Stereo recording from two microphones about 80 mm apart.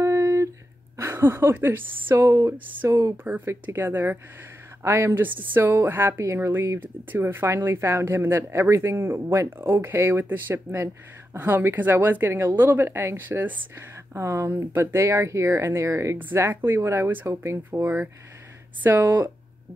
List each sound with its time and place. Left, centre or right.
0.0 s a sound: right
0.9 s a woman's voice: right
2.8 s a woman's voice: right
3.3 s a woman's voice: right
16.2 s a woman's voice: right